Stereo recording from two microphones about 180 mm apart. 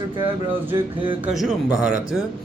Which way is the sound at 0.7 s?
25° right (ahead or behind).